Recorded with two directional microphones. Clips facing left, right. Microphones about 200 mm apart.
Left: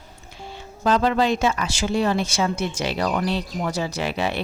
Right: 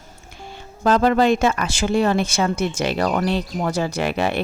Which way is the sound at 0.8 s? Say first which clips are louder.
Right 3 dB; 50° right (ahead or behind).